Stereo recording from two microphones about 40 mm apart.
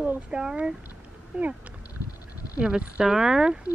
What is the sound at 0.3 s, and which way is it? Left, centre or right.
Speech, right.